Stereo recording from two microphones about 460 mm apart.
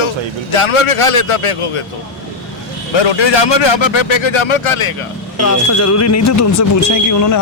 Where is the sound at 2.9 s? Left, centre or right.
Left.